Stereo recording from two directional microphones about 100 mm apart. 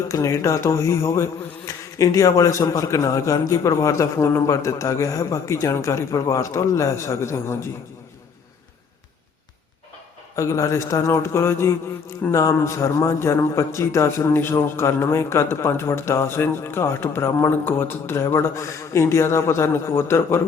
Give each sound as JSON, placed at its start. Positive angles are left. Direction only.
{"t": 0.1, "sound": "speech", "side_deg": 30}
{"t": 10.3, "sound": "a man's voice", "side_deg": 30}